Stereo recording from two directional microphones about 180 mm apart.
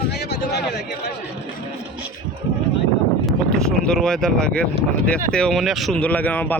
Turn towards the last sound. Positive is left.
turn(degrees=10)  # may be behind; listen again after turning